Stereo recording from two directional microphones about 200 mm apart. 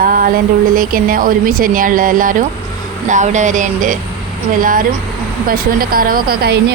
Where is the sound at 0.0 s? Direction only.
45° right (ahead or behind).